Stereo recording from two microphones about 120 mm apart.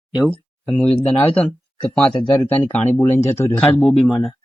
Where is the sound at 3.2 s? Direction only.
25° left (ahead or behind).